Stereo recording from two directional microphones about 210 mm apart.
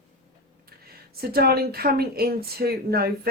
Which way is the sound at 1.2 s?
45° right (ahead or behind).